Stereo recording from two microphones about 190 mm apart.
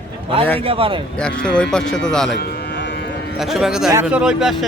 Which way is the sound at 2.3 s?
65° left (ahead or behind).